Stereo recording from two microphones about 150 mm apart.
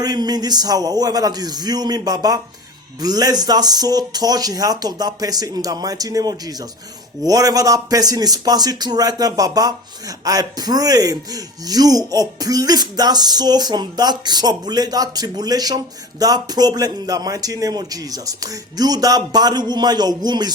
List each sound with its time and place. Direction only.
0.0 s speech: 25° right (ahead or behind)